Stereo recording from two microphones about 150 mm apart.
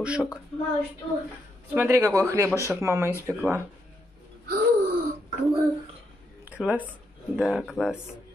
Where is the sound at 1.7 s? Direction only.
15° right (ahead or behind).